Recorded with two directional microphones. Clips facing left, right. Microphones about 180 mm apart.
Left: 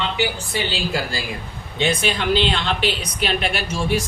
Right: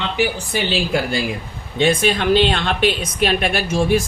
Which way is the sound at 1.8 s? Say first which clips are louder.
Right 5 dB; 55° right (ahead or behind).